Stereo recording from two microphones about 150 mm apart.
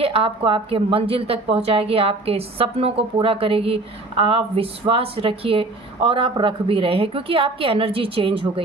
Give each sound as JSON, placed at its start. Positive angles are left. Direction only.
{"t": 0.0, "sound": "a woman's voice", "side_deg": -40}